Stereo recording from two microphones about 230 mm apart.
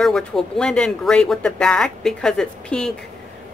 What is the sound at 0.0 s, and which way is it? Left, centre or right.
Speech, centre.